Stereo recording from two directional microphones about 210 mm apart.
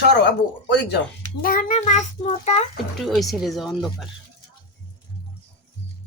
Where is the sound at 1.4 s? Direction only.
45° left (ahead or behind).